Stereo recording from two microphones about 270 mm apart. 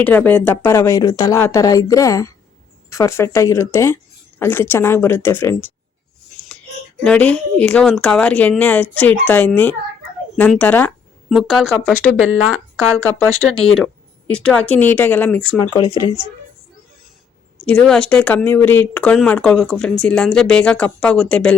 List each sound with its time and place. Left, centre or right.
0.0 s speech: centre
7.0 s speech: centre
13.4 s speech: centre
15.7 s speech: centre
17.7 s speech: centre